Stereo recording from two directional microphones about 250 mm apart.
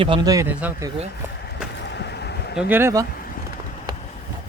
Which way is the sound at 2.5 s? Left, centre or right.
Centre.